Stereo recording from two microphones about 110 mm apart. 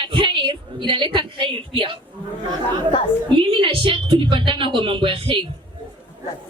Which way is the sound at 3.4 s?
50° right (ahead or behind).